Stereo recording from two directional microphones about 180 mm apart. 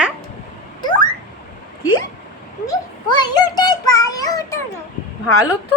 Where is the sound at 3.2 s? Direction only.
20° left (ahead or behind).